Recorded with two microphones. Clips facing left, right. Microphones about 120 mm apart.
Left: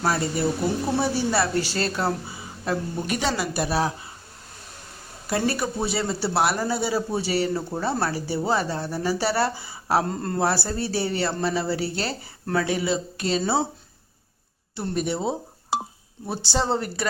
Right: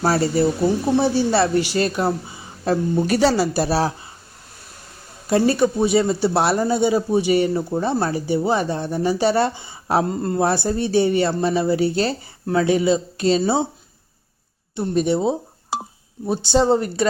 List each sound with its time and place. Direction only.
0.0 s speech: 30° right (ahead or behind)
1.6 s speech: 15° right (ahead or behind)
2.6 s speech: 35° right (ahead or behind)
5.3 s speech: 25° right (ahead or behind)
14.8 s speech: 25° right (ahead or behind)